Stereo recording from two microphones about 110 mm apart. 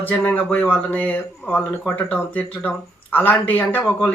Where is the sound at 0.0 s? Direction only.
15° left (ahead or behind).